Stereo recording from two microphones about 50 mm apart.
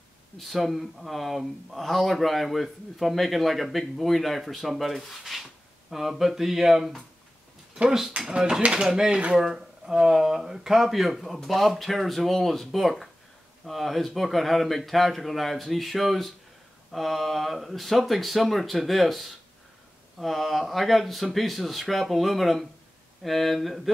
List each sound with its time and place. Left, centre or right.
0.4 s speech: centre
8.3 s speech: centre